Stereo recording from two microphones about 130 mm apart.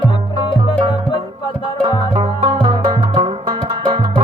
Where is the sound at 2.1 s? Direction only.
40° right (ahead or behind).